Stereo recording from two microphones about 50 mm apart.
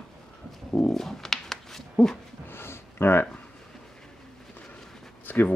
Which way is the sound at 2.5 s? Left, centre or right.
Left.